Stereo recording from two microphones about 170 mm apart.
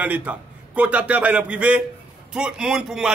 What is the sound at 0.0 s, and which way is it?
A man's voice, 10° right (ahead or behind).